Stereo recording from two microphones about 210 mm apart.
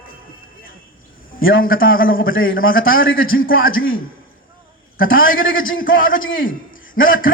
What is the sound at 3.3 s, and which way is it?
Speech, 45° left (ahead or behind).